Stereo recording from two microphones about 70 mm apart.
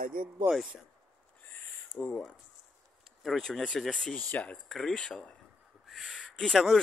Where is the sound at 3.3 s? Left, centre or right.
Centre.